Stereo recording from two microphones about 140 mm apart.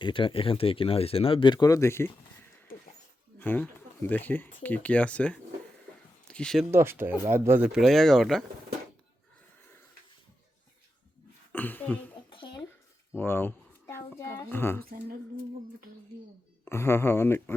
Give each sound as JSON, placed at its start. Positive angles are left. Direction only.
{"t": 0.0, "sound": "speech", "side_deg": 35}
{"t": 3.3, "sound": "speech", "side_deg": 15}
{"t": 6.7, "sound": "speech", "side_deg": -15}
{"t": 7.7, "sound": "speech", "side_deg": 0}
{"t": 11.5, "sound": "a sound", "side_deg": 10}
{"t": 12.3, "sound": "a sound", "side_deg": 35}
{"t": 13.1, "sound": "a child's voice", "side_deg": 15}
{"t": 16.6, "sound": "speech", "side_deg": 15}